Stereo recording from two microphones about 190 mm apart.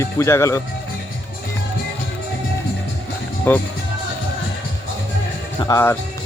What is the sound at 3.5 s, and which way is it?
Speech, 10° left (ahead or behind).